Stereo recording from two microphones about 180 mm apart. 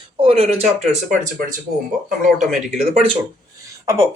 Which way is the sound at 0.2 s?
35° right (ahead or behind).